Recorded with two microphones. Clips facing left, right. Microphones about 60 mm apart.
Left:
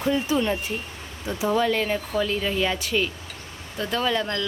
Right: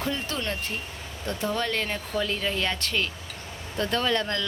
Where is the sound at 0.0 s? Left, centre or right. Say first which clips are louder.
Left 7 dB; centre.